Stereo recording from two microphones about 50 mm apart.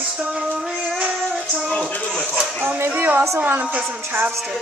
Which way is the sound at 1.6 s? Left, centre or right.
Left.